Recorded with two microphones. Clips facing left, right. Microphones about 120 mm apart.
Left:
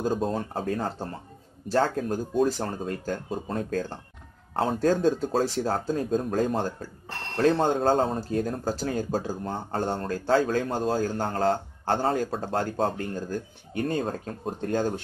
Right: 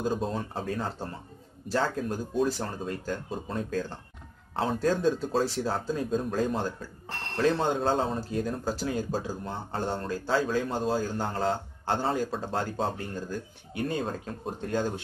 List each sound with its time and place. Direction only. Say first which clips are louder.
0.3 s a man's voice: left 4 dB; 45° left (ahead or behind)